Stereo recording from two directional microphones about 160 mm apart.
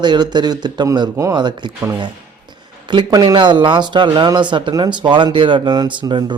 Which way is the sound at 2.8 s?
25° right (ahead or behind).